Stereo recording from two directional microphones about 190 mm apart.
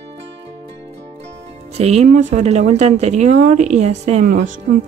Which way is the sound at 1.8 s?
35° right (ahead or behind).